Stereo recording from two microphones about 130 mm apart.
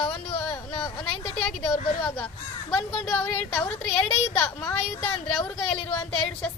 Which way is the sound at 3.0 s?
5° left (ahead or behind).